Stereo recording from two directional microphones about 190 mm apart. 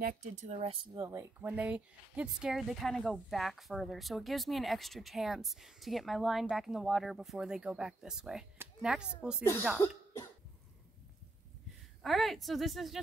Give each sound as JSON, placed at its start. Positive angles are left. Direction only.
{"t": 0.2, "sound": "speech", "side_deg": -35}
{"t": 0.9, "sound": "speech", "side_deg": -15}
{"t": 9.4, "sound": "speech", "side_deg": 10}
{"t": 9.8, "sound": "cough", "side_deg": 10}
{"t": 12.0, "sound": "speech", "side_deg": 0}